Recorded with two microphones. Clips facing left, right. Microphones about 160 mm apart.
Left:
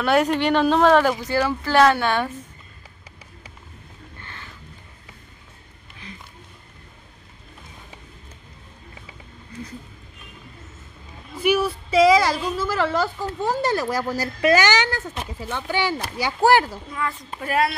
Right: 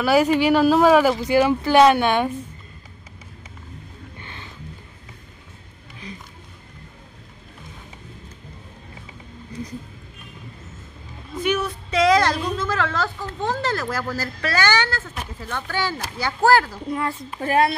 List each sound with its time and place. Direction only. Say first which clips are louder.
0.0 s speech: right 2 dB; 5° right (ahead or behind)
4.2 s a sound: right 1 dB; 20° right (ahead or behind)
11.4 s a woman's voice: left 3 dB; 10° left (ahead or behind)
17.4 s speech: right 3 dB; 30° right (ahead or behind)